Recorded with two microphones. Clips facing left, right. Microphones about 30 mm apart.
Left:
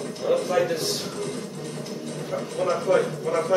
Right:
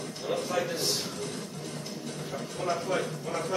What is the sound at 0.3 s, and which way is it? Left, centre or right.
Speech, centre.